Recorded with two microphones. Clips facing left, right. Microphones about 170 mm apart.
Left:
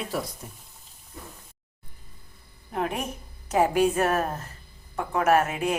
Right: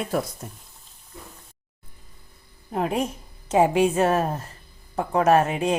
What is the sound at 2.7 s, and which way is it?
A woman's voice, 30° right (ahead or behind).